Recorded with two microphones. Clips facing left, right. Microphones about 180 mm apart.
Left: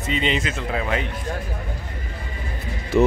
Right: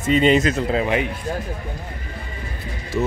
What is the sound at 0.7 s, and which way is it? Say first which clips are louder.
Speech: right 1 dB; 20° right (ahead or behind).